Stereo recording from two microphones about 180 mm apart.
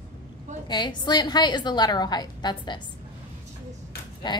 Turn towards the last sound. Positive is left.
turn(degrees=25)  # may be behind; listen again after turning